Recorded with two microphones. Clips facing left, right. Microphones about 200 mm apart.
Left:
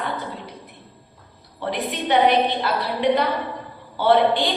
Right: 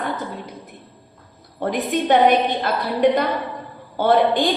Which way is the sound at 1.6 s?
45° right (ahead or behind).